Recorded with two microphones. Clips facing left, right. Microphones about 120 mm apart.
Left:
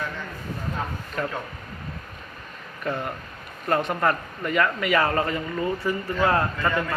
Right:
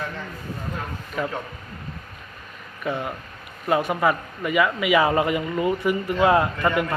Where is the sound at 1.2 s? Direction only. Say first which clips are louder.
Right 2 dB; 5° right (ahead or behind).